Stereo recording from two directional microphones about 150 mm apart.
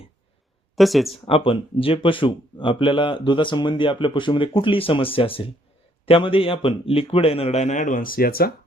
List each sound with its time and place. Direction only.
0.8 s speech: centre (ahead or behind)
1.1 s speech: 40° left (ahead or behind); by 8.5 s 85° left